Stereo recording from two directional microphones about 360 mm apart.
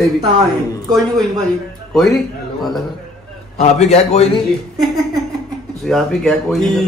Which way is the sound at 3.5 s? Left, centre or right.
Centre.